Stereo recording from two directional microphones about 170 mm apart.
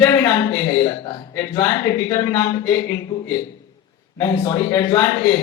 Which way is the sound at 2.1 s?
20° left (ahead or behind).